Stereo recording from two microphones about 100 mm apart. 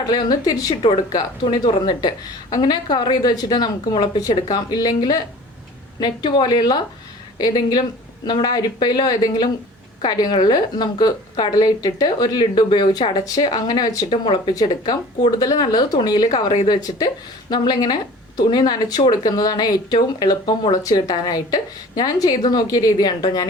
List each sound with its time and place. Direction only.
0.0 s speech: 45° left (ahead or behind)
0.7 s speech: 65° left (ahead or behind)
1.1 s speech: 50° left (ahead or behind)
14.1 s speech: 50° left (ahead or behind)